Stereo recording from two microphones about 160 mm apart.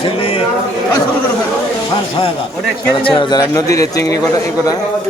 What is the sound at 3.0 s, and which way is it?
A man's voice, 30° left (ahead or behind).